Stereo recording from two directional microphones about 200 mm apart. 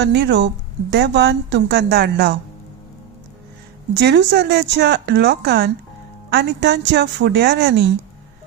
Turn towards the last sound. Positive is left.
turn(degrees=-60)  # may be behind; listen again after turning